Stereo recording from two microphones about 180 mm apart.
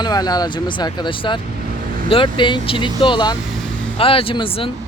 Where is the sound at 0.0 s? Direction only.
20° left (ahead or behind).